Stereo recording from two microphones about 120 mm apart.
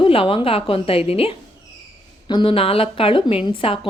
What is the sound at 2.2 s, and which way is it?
Speech, 45° left (ahead or behind).